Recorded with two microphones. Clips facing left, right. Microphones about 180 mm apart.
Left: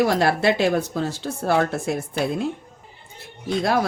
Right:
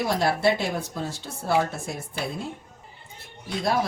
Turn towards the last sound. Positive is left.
turn(degrees=70)  # may be behind; listen again after turning